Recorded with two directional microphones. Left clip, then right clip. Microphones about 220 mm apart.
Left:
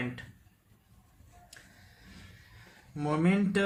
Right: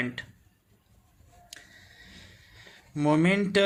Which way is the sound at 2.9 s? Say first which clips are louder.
Right 6 dB; 40° right (ahead or behind).